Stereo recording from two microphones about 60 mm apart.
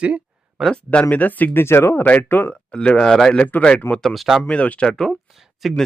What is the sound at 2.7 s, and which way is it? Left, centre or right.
Speech, centre.